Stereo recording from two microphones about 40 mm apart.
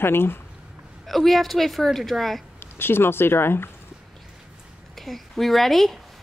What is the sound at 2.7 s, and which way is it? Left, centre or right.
Speech, left.